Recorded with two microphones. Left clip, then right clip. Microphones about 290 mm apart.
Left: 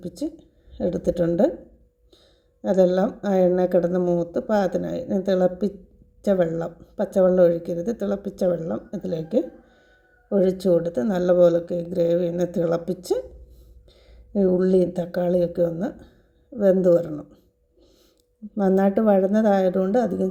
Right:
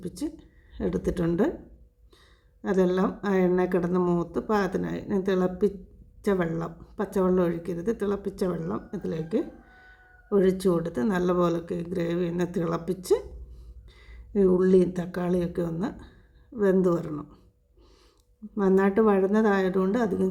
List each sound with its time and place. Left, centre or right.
0.0 s a woman's voice: centre
2.6 s a woman's voice: centre
14.3 s speech: centre
18.6 s a woman's voice: centre